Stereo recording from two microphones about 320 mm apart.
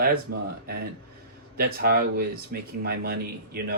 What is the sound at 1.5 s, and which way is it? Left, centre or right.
Speech, right.